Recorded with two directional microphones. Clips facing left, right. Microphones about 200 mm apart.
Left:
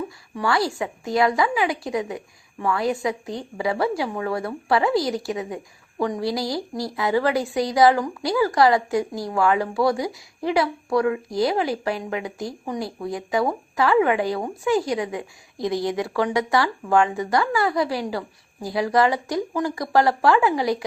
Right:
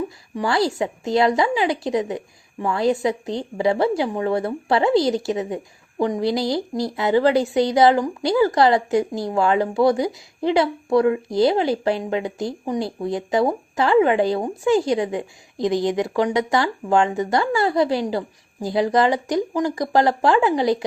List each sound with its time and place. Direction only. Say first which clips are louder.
0.4 s speech: right 2 dB; 25° right (ahead or behind)